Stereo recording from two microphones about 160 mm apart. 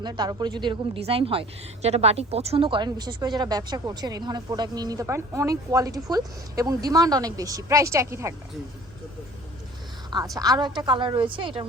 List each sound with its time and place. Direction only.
0.0 s a woman's voice: 25° right (ahead or behind)
10.1 s a woman's voice: 25° right (ahead or behind)